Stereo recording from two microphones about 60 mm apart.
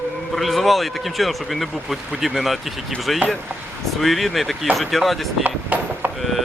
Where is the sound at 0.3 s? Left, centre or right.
Centre.